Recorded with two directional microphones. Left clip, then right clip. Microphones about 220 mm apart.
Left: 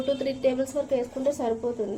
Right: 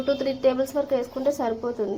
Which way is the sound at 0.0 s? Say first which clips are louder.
Right 3 dB; centre (ahead or behind).